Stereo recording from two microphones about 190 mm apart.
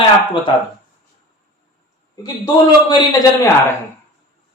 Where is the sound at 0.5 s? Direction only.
25° left (ahead or behind).